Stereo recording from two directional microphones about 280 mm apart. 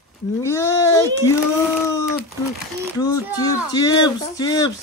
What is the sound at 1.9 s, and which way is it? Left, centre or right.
Speech, centre.